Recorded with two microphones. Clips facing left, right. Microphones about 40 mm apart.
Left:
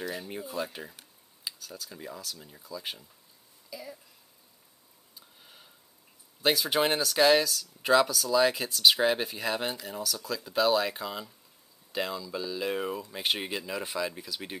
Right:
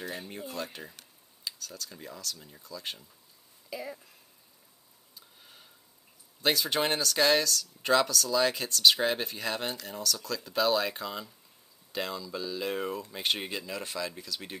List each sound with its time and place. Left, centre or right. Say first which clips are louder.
0.3 s speech: left 3 dB; centre
3.7 s speech: right 4 dB; centre
5.4 s a sound: left 1 dB; centre
6.4 s speech: left 2 dB; centre